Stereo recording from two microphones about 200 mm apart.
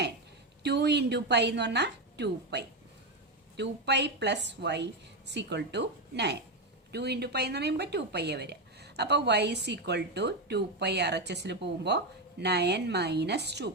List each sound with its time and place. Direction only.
0.6 s a woman's voice: 55° right (ahead or behind)